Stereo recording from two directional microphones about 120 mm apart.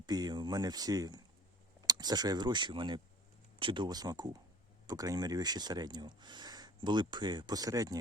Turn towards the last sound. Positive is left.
turn(degrees=-30)  # may be behind; listen again after turning